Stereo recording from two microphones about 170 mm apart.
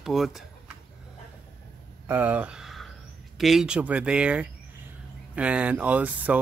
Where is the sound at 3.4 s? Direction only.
Centre (ahead or behind).